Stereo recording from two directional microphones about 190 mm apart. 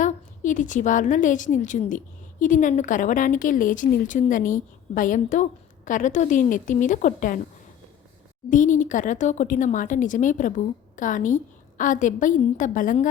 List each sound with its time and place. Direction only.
0.0 s a woman's voice: 40° left (ahead or behind)
8.4 s a woman's voice: 40° left (ahead or behind)